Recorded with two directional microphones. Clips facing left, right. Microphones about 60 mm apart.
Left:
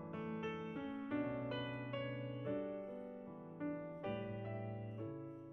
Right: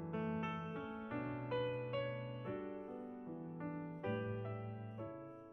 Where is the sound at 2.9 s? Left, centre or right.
Right.